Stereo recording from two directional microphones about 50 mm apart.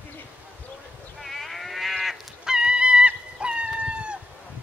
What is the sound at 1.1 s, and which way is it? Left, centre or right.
Sheep, centre.